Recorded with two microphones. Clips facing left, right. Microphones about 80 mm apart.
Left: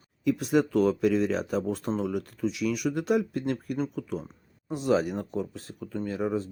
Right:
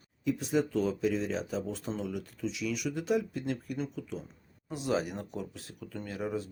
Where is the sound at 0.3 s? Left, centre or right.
Left.